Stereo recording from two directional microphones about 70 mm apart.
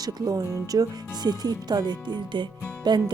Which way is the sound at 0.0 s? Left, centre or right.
Right.